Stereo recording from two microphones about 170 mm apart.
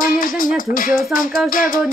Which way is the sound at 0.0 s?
55° left (ahead or behind).